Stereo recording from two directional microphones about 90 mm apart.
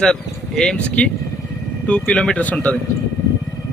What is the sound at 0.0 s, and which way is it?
Speech, 5° left (ahead or behind).